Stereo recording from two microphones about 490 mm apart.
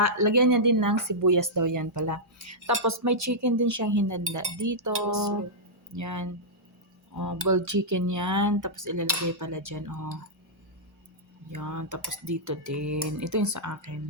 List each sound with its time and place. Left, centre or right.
0.0 s speech: right
5.9 s speech: right
11.5 s speech: right